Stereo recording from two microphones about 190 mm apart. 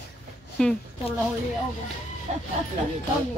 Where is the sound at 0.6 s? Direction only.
5° left (ahead or behind).